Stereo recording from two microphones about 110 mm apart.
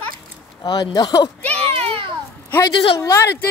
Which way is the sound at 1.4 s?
15° left (ahead or behind).